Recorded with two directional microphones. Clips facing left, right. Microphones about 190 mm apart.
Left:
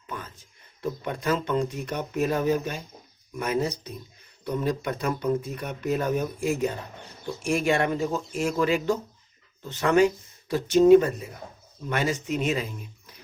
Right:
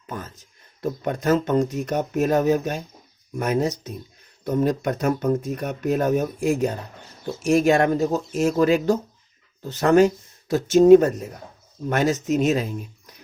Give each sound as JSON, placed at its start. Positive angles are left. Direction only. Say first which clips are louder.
{"t": 0.1, "sound": "speech", "louder": "right 4 dB", "side_deg": -40}